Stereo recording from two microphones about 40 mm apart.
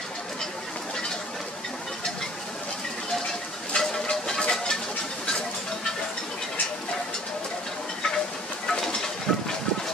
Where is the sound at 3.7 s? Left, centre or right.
Centre.